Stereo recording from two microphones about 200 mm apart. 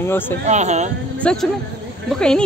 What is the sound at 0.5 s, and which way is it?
Speech, 35° right (ahead or behind).